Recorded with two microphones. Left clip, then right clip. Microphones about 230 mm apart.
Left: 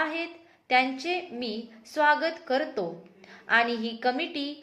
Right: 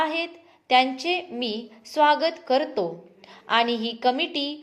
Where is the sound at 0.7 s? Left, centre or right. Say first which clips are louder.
Right 4 dB; right.